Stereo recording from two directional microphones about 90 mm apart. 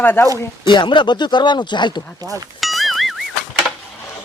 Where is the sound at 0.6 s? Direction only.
60° left (ahead or behind).